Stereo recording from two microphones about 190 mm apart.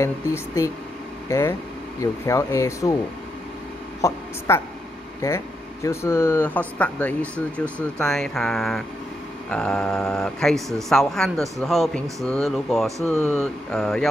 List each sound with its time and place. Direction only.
0.0 s speech: 15° left (ahead or behind)
4.0 s speech: 20° left (ahead or behind); by 14.0 s centre (ahead or behind)